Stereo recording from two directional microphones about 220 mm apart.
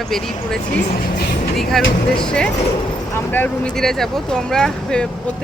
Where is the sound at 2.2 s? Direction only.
5° left (ahead or behind).